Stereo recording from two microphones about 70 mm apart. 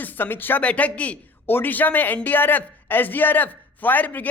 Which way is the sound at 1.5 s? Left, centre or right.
Left.